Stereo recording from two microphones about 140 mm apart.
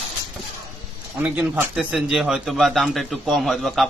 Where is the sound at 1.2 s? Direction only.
10° right (ahead or behind).